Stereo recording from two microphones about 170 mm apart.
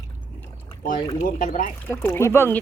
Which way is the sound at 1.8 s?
15° left (ahead or behind).